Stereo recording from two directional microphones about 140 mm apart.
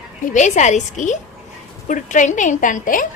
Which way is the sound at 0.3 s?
60° left (ahead or behind).